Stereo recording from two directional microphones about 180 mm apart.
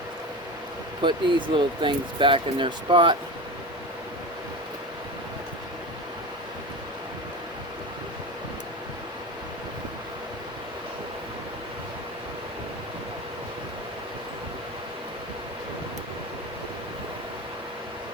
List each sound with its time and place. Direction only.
1.0 s speech: 25° right (ahead or behind)